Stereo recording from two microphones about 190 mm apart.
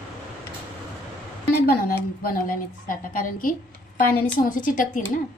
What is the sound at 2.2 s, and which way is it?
A woman's voice, 45° left (ahead or behind).